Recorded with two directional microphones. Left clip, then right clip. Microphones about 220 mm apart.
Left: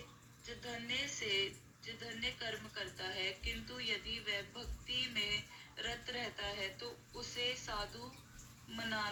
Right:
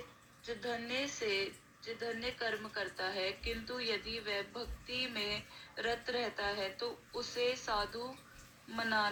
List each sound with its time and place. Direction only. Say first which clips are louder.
0.4 s speech: right 5 dB; 15° right (ahead or behind)